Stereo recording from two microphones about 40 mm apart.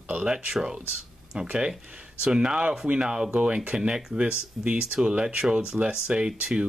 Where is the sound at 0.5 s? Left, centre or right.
Centre.